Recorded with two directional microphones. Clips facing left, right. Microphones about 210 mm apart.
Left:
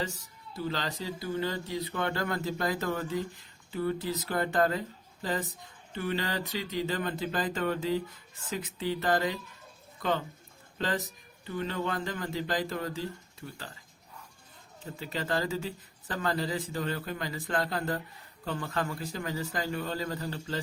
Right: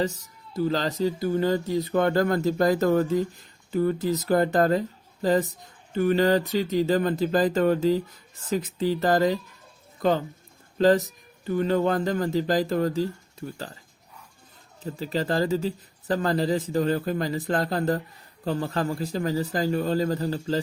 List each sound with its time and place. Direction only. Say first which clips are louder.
0.0 s speech: right 8 dB; 40° right (ahead or behind)
10.8 s speech: right 13 dB; 40° right (ahead or behind)
14.8 s speech: right 7 dB; 35° right (ahead or behind)